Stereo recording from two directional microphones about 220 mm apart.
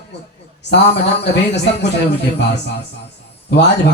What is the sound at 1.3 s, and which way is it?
Speech, 50° left (ahead or behind).